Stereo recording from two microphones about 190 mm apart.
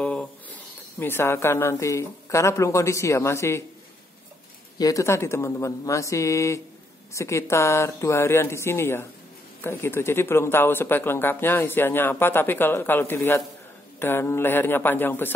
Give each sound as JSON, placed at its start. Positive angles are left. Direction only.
{"t": 0.0, "sound": "snake", "side_deg": 5}
{"t": 0.9, "sound": "a man's voice", "side_deg": 10}
{"t": 4.7, "sound": "a man's voice", "side_deg": 15}